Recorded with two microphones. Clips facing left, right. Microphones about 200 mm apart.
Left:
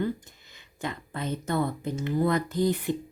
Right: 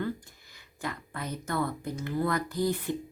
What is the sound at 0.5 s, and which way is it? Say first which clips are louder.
Speech: left 2 dB; 25° left (ahead or behind).